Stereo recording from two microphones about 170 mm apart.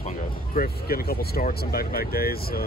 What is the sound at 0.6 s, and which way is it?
Speech, 60° left (ahead or behind).